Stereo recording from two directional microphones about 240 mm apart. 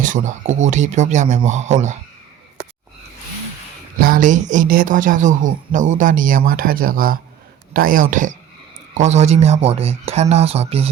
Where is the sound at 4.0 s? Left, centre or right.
Right.